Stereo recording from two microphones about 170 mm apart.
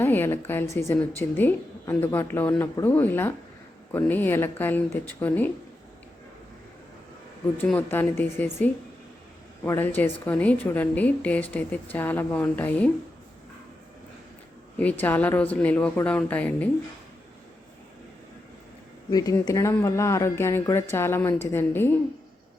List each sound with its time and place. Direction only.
0.0 s a woman's voice: 15° left (ahead or behind)
7.6 s a woman's voice: 10° left (ahead or behind)
9.6 s a woman's voice: 10° left (ahead or behind)
14.8 s a woman's voice: 10° left (ahead or behind)
19.1 s a woman's voice: 20° left (ahead or behind)